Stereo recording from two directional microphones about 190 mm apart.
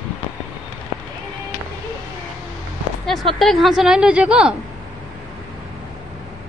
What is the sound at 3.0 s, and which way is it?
Speech, centre (ahead or behind).